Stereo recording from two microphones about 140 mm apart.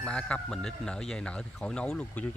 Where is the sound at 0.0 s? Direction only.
10° left (ahead or behind).